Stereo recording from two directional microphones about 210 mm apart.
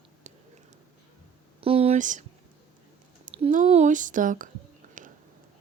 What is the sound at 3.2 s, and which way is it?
Speech, 35° right (ahead or behind).